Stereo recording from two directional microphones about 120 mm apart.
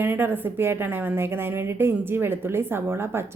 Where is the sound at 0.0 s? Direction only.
15° right (ahead or behind).